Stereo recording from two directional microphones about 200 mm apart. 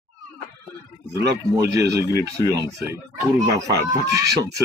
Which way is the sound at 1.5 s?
15° right (ahead or behind).